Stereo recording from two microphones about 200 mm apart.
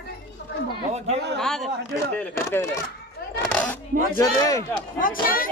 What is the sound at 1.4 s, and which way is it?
A man's voice, centre (ahead or behind).